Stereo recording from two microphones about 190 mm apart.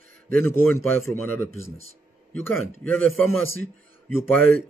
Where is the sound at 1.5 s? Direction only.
90° right.